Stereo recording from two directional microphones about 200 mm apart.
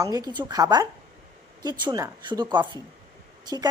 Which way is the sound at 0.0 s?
20° right (ahead or behind).